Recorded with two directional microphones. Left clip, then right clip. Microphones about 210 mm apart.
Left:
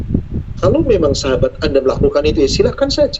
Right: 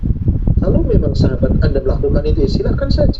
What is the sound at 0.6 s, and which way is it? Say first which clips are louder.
A woman's voice: left 6 dB; 30° left (ahead or behind).